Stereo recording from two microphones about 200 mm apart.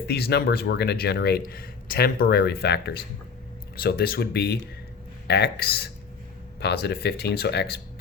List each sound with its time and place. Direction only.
0.1 s speech: 55° left (ahead or behind)